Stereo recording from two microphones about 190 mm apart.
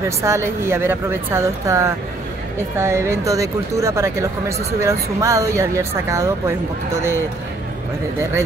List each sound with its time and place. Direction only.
0.2 s speech: 15° right (ahead or behind)